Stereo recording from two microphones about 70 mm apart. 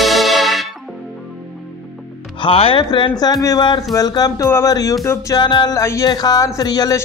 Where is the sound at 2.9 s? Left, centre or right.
Left.